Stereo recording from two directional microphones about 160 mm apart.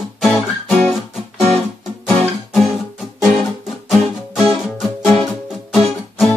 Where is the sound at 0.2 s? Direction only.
Centre (ahead or behind).